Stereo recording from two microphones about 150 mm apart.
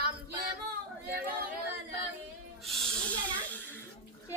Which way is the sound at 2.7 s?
10° left (ahead or behind).